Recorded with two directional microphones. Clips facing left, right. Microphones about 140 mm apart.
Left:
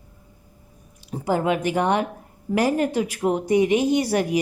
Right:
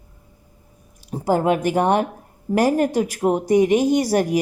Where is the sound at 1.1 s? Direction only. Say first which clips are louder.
Right 3 dB; 45° right (ahead or behind).